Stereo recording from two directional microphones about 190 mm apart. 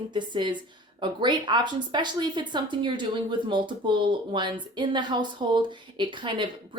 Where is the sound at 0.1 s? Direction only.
25° right (ahead or behind).